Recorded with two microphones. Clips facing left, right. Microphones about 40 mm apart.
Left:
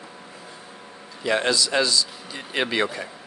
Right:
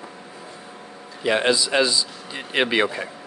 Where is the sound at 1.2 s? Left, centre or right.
Right.